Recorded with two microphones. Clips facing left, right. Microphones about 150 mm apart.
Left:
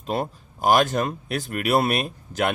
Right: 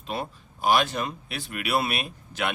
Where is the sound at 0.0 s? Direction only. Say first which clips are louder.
Left 6 dB; 45° left (ahead or behind).